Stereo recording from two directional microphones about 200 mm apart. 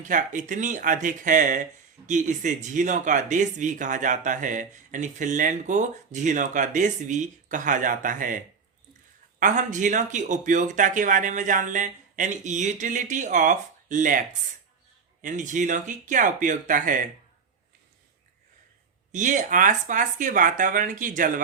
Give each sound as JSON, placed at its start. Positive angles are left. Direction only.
{"t": 0.0, "sound": "speech", "side_deg": -40}
{"t": 9.4, "sound": "speech", "side_deg": -40}
{"t": 19.1, "sound": "speech", "side_deg": -40}